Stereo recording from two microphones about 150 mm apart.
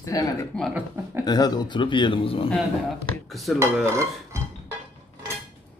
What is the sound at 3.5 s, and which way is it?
Dishes, 20° right (ahead or behind).